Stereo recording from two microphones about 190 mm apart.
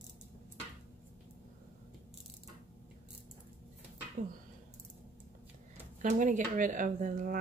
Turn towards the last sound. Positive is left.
turn(degrees=-45)  # may be behind; listen again after turning